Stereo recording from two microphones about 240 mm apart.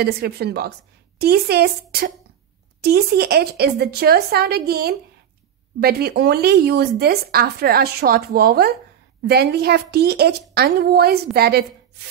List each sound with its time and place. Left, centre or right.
0.0 s a woman's voice: right